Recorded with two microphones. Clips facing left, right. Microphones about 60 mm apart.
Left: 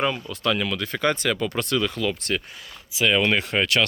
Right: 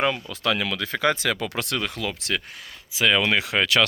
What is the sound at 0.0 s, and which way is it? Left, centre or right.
Speech, right.